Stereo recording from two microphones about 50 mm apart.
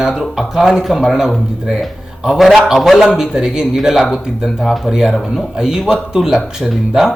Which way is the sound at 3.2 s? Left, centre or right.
Centre.